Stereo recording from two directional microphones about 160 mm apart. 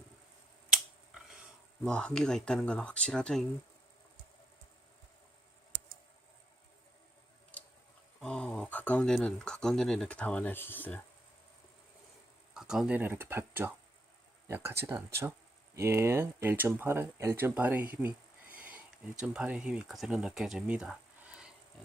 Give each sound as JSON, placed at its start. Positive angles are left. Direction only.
{"t": 1.8, "sound": "speech", "side_deg": 5}
{"t": 8.2, "sound": "speech", "side_deg": 5}
{"t": 12.5, "sound": "speech", "side_deg": -5}